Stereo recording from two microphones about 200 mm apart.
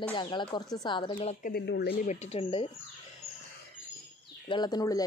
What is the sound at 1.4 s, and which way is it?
Speech, 55° left (ahead or behind).